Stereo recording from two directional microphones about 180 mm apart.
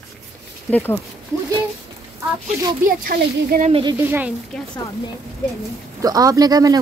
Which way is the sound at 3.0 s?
55° right (ahead or behind).